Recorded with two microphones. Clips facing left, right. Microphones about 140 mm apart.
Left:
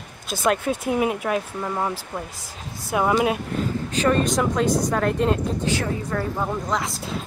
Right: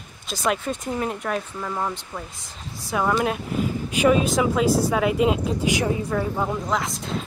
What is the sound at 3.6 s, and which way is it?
Speech, 10° right (ahead or behind).